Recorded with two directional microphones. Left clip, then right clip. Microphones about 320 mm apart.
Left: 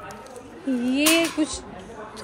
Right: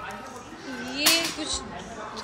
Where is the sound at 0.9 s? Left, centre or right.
Centre.